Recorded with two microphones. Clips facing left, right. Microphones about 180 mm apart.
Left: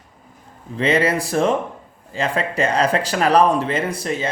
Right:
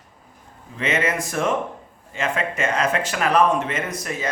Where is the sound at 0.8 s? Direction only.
35° left (ahead or behind).